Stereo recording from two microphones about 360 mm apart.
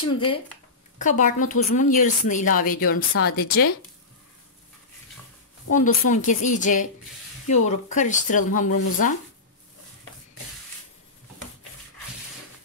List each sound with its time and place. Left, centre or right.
0.0 s speech: centre
6.0 s speech: left